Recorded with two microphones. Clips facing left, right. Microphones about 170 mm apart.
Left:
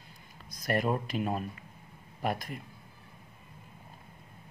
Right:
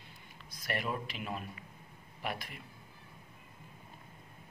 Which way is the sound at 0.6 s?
45° left (ahead or behind).